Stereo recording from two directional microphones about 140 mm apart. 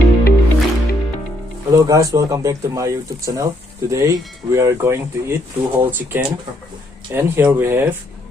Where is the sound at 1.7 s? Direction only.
25° right (ahead or behind).